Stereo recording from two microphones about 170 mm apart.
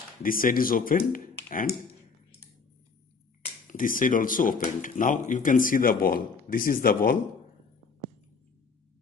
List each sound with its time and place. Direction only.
0.2 s speech: 55° left (ahead or behind)
3.6 s speech: 55° left (ahead or behind)